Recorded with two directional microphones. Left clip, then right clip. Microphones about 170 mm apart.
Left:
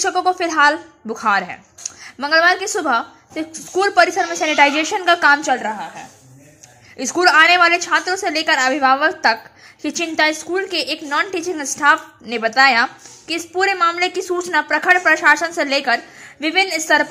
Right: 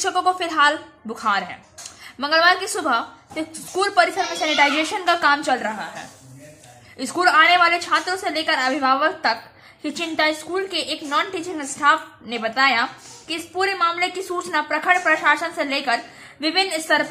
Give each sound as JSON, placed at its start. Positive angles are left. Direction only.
{"t": 0.0, "sound": "a woman's voice", "side_deg": 20}
{"t": 7.0, "sound": "a woman's voice", "side_deg": 25}